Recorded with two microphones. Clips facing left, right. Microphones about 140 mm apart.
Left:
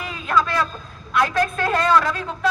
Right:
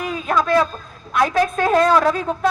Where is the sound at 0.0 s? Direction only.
50° right (ahead or behind).